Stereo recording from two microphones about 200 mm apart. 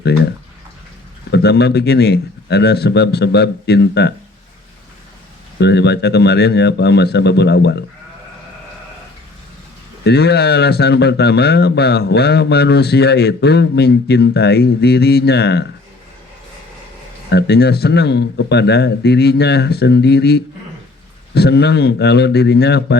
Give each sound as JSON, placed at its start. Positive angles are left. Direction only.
{"t": 1.3, "sound": "speech", "side_deg": 55}
{"t": 5.5, "sound": "speech", "side_deg": 60}
{"t": 10.0, "sound": "speech", "side_deg": 55}
{"t": 17.3, "sound": "speech", "side_deg": 55}